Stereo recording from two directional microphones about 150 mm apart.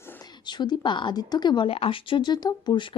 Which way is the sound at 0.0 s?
15° left (ahead or behind).